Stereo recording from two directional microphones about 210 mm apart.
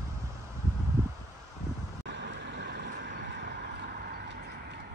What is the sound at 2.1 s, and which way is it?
Vehicle, 55° right (ahead or behind).